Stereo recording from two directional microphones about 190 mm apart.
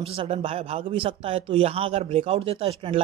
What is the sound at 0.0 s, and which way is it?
Speech, 30° right (ahead or behind).